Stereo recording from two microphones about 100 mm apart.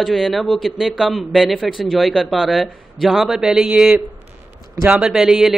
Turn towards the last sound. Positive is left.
turn(degrees=-5)  # may be behind; listen again after turning